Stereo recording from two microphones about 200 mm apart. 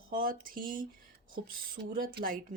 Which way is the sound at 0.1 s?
45° right (ahead or behind).